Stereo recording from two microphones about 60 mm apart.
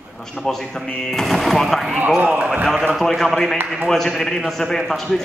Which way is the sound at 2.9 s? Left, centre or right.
Centre.